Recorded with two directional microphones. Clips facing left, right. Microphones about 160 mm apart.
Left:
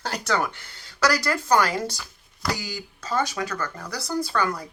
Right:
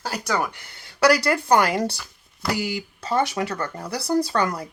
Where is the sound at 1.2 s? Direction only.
20° right (ahead or behind).